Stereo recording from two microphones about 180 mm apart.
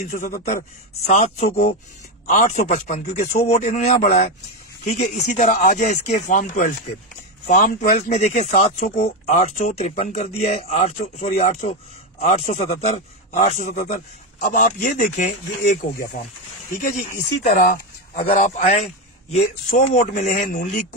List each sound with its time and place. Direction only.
0.1 s a man's voice: 45° left (ahead or behind)